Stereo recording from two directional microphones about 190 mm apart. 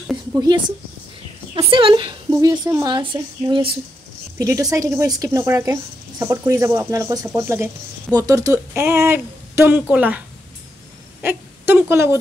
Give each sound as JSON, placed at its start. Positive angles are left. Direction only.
{"t": 0.0, "sound": "a sound", "side_deg": 0}
{"t": 1.5, "sound": "a woman's voice", "side_deg": -25}
{"t": 11.2, "sound": "a woman's voice", "side_deg": -10}